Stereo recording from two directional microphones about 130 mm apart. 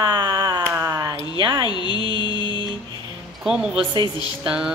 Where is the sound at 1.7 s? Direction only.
35° left (ahead or behind).